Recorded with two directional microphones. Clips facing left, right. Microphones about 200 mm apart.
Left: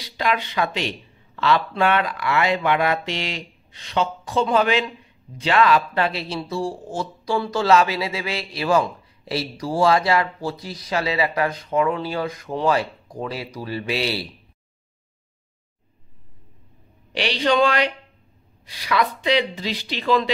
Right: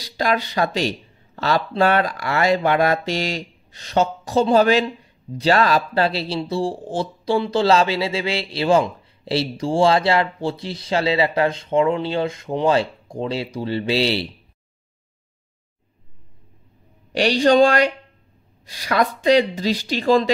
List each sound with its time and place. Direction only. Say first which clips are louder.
0.0 s speech: right 2 dB; 40° right (ahead or behind)
17.1 s speech: right 5 dB; 45° right (ahead or behind)